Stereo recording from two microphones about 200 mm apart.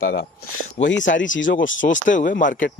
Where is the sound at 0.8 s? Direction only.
65° left (ahead or behind).